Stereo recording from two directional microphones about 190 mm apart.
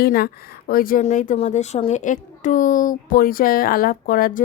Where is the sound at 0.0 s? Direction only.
50° left (ahead or behind).